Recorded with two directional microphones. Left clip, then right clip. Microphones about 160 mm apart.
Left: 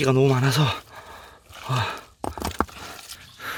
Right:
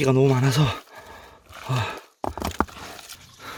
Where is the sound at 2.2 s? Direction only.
40° right (ahead or behind).